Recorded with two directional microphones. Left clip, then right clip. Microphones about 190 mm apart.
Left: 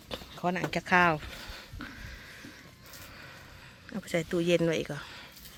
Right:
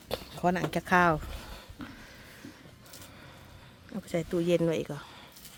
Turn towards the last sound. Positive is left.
turn(degrees=-10)  # may be behind; listen again after turning